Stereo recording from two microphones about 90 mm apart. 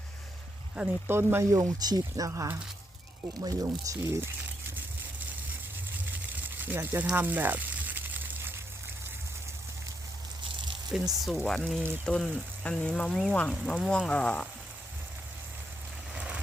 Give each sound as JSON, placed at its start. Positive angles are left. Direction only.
{"t": 0.8, "sound": "speech", "side_deg": -15}
{"t": 1.1, "sound": "speech", "side_deg": -30}
{"t": 1.8, "sound": "speech", "side_deg": -45}
{"t": 6.1, "sound": "a sound", "side_deg": -20}
{"t": 7.2, "sound": "frying", "side_deg": -20}
{"t": 10.9, "sound": "speech", "side_deg": -5}
{"t": 12.0, "sound": "frying", "side_deg": 10}
{"t": 16.1, "sound": "vehicle", "side_deg": -10}